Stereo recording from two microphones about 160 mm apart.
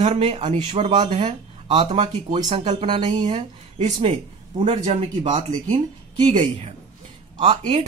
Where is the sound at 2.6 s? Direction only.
45° right (ahead or behind).